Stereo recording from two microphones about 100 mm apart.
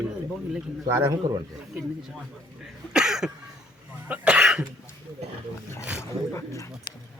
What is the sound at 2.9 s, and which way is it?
Cough, 5° right (ahead or behind).